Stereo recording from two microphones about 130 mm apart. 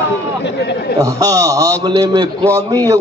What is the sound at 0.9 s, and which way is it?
A man's voice, 25° right (ahead or behind).